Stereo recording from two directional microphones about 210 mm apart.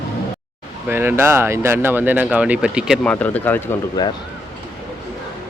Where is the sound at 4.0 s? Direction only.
20° left (ahead or behind).